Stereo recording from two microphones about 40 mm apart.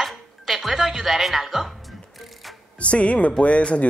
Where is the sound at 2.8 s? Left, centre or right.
Left.